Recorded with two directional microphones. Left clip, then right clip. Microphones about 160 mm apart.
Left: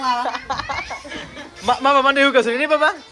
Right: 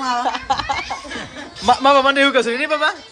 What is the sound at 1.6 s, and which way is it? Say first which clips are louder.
A man's voice: right 2 dB; 20° right (ahead or behind).